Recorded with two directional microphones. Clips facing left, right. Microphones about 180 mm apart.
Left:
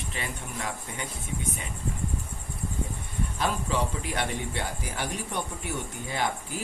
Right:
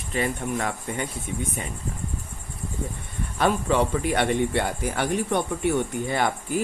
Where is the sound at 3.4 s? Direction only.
60° right (ahead or behind).